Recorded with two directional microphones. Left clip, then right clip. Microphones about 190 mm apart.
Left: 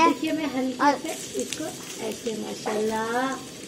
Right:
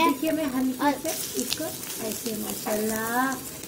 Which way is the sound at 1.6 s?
Centre (ahead or behind).